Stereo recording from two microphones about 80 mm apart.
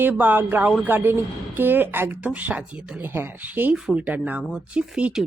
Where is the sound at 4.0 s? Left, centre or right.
Centre.